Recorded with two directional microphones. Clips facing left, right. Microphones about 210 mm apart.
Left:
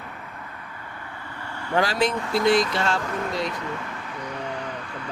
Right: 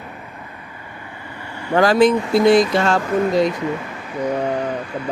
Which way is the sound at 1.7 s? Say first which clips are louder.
Right 9 dB; 50° right (ahead or behind).